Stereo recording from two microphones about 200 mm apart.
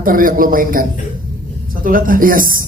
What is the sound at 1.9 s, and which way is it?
Speech, 45° right (ahead or behind).